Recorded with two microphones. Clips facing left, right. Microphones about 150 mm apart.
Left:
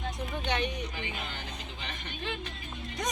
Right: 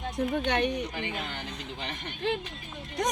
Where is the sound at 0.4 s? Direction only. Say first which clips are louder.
Right 5 dB; 55° right (ahead or behind).